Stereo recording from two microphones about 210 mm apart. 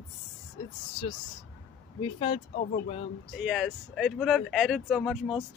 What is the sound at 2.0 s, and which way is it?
Speech, 25° left (ahead or behind).